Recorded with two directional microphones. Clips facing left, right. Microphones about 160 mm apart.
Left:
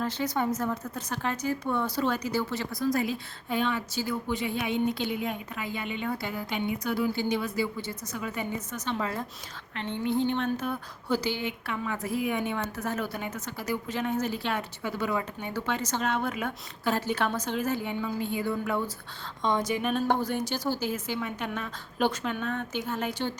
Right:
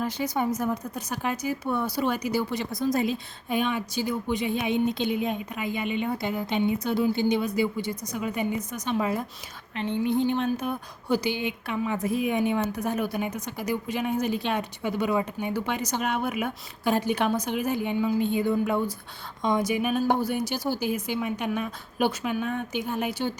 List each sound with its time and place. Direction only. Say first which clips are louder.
0.0 s a woman's voice: right 2 dB; 10° right (ahead or behind)